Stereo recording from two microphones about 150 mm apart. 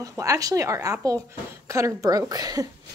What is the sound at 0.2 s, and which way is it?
A woman's voice, 20° right (ahead or behind).